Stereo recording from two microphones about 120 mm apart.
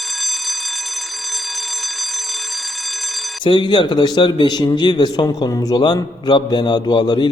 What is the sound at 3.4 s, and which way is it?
A man's voice, 40° left (ahead or behind).